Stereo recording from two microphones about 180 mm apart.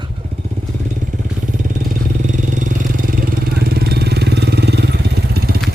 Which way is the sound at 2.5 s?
50° right (ahead or behind).